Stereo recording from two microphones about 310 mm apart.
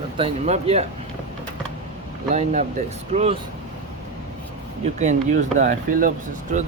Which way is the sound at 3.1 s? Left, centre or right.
Centre.